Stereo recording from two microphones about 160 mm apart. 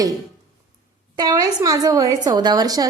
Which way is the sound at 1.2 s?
25° right (ahead or behind).